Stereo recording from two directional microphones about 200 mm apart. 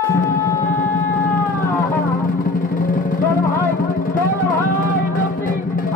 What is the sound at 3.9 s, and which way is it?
Vehicle, 45° left (ahead or behind).